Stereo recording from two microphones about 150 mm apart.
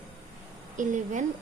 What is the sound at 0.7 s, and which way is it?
Speech, 55° right (ahead or behind).